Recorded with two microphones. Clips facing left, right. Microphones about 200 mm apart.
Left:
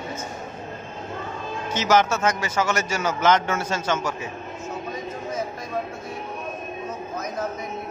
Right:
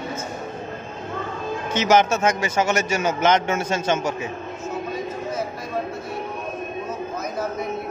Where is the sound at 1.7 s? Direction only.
20° right (ahead or behind).